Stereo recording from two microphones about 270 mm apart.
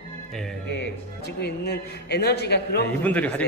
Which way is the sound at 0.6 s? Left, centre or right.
Left.